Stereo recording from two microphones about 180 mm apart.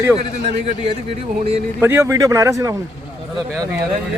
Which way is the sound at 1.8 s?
15° right (ahead or behind).